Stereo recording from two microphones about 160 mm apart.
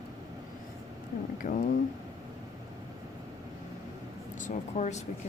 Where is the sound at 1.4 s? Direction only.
60° left (ahead or behind).